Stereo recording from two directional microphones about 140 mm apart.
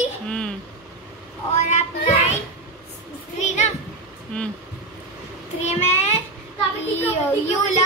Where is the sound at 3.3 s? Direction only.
55° left (ahead or behind).